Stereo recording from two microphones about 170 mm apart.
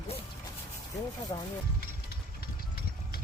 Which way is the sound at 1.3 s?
25° left (ahead or behind).